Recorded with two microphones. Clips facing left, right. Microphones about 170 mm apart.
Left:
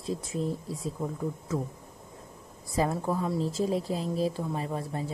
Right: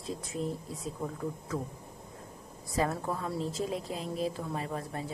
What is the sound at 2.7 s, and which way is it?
Speech, 30° left (ahead or behind).